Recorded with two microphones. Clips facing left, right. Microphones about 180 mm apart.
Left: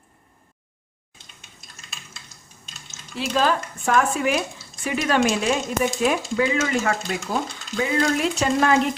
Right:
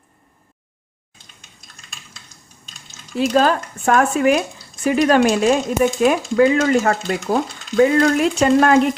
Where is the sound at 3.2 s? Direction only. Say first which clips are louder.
Right 6 dB; 45° right (ahead or behind).